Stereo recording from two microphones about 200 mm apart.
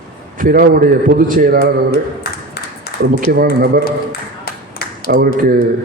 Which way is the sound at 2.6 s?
55° left (ahead or behind).